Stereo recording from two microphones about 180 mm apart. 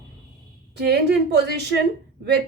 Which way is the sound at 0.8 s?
65° right (ahead or behind).